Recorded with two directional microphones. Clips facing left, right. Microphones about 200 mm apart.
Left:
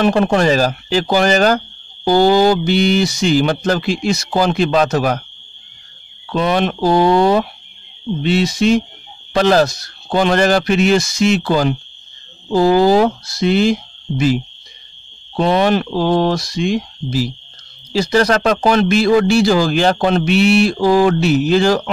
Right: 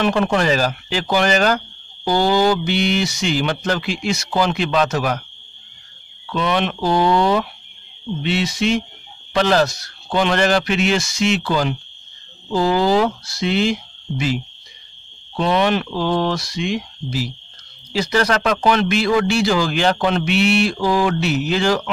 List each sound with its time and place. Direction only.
0.0 s speech: 35° left (ahead or behind)
6.2 s speech: 40° left (ahead or behind)